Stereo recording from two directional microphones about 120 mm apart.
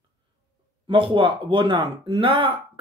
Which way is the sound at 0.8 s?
45° right (ahead or behind).